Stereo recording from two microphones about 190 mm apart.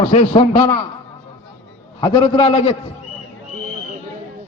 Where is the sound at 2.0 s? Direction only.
25° left (ahead or behind).